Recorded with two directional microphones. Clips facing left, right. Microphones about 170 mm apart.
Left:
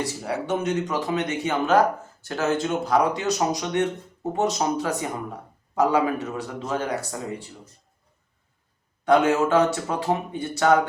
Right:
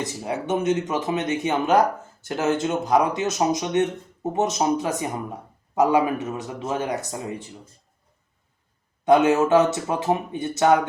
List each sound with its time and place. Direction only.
0.0 s speech: 20° right (ahead or behind)
9.0 s speech: 20° right (ahead or behind)